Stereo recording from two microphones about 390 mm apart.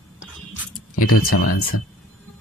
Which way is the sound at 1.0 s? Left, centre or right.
Left.